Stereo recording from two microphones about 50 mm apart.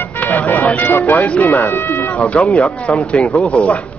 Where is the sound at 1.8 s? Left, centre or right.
Left.